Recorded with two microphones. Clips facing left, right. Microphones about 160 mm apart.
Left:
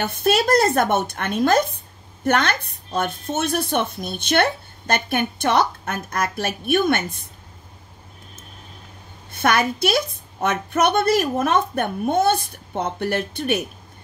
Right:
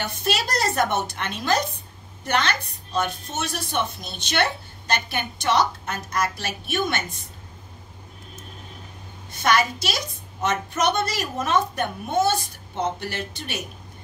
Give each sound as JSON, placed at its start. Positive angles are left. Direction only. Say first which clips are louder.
{"t": 0.0, "sound": "a woman's voice", "louder": "left 7 dB", "side_deg": 55}
{"t": 9.3, "sound": "speech", "louder": "left 2 dB", "side_deg": 55}